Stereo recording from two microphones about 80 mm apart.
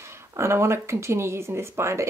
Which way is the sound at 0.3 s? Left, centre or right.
Right.